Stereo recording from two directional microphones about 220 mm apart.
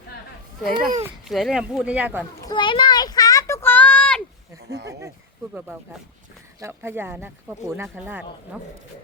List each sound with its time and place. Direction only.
0.8 s a child's voice: 40° right (ahead or behind)
1.0 s speech: centre (ahead or behind)
2.4 s a sound: 20° left (ahead or behind)
4.9 s speech: 15° right (ahead or behind)